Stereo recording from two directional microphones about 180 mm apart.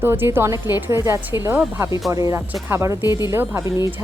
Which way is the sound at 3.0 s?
20° left (ahead or behind).